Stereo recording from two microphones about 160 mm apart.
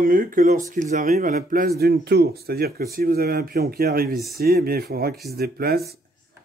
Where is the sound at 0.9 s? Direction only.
50° right (ahead or behind).